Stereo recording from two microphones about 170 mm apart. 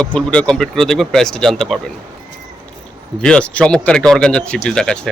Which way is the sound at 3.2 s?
5° left (ahead or behind).